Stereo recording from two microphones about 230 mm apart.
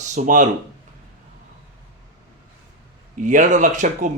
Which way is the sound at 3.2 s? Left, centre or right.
Right.